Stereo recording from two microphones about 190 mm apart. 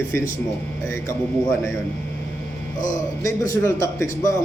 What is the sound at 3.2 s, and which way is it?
A man's voice, 15° left (ahead or behind).